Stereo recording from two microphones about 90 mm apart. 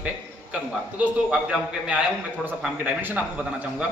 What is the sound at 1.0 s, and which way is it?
A man's voice, 10° right (ahead or behind).